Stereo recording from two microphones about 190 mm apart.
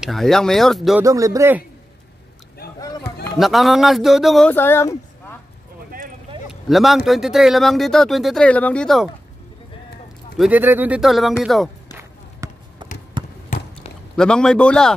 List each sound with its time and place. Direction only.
0.0 s speech: centre (ahead or behind)
1.0 s speech: 15° right (ahead or behind)
3.3 s speech: centre (ahead or behind)
6.5 s a sound: centre (ahead or behind)
7.1 s speech: centre (ahead or behind)
10.3 s speech: 5° right (ahead or behind)
11.9 s run: 10° right (ahead or behind)
13.2 s trickle: 25° right (ahead or behind)
14.1 s speech: 5° left (ahead or behind)